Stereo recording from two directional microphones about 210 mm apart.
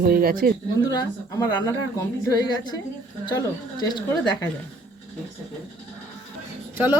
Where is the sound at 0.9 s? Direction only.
15° left (ahead or behind).